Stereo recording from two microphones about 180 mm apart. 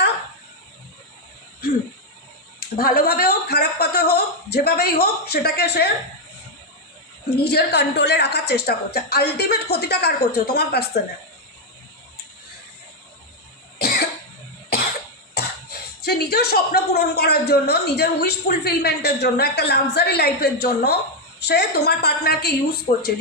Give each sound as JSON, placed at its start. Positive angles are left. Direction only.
{"t": 2.6, "sound": "speech", "side_deg": 55}
{"t": 7.3, "sound": "a woman's voice", "side_deg": 65}
{"t": 13.7, "sound": "cough", "side_deg": 65}
{"t": 15.4, "sound": "speech", "side_deg": 60}